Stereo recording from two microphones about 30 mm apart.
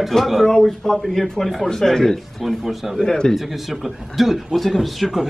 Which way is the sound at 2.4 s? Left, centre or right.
Centre.